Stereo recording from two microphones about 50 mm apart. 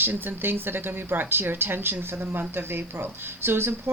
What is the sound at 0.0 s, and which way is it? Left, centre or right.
A woman's voice, right.